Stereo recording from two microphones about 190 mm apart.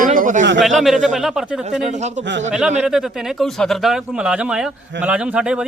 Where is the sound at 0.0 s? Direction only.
45° right (ahead or behind).